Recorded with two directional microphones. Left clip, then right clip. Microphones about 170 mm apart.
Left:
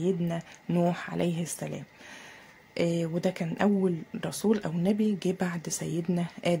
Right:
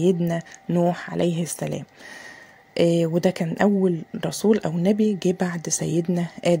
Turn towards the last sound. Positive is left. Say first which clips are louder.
# right 7 dB
turn(degrees=-30)  # may be behind; listen again after turning